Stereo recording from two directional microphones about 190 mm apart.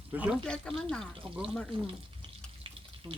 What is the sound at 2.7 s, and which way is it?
Water, 30° right (ahead or behind).